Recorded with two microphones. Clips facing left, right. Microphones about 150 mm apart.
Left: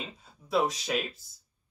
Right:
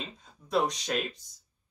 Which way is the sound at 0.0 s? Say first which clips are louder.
Even; 5° left (ahead or behind).